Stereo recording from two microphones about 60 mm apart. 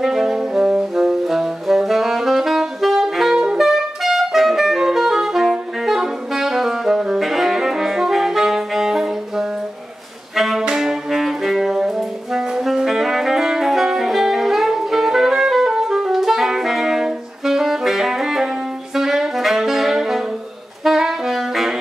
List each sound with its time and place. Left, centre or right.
0.0 s brass instrument: centre
10.3 s saxophone: centre